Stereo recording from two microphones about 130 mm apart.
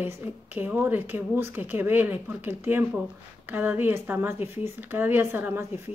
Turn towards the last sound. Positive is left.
turn(degrees=-15)  # may be behind; listen again after turning